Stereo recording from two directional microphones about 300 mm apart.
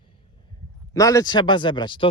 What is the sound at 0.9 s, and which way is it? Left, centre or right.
Speech, centre.